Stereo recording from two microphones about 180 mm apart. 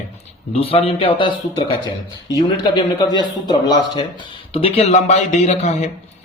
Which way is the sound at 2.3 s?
20° left (ahead or behind).